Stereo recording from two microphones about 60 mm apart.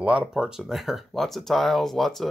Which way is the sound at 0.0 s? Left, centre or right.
Right.